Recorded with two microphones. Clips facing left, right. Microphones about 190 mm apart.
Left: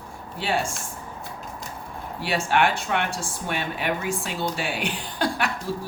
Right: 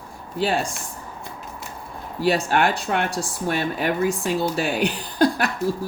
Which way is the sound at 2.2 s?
40° right (ahead or behind).